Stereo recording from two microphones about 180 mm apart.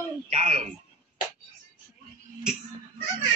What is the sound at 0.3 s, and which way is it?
Speech, 40° right (ahead or behind).